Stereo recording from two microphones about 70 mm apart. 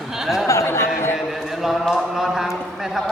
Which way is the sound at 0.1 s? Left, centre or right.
Centre.